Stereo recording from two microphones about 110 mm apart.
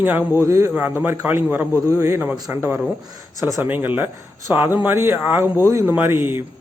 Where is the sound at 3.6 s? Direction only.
15° right (ahead or behind).